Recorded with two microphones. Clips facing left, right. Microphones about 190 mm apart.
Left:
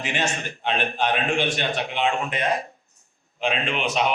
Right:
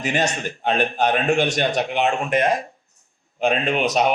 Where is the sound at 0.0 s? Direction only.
40° right (ahead or behind).